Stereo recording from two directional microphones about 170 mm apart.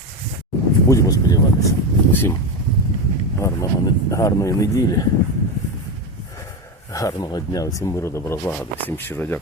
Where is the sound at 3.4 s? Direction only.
20° left (ahead or behind).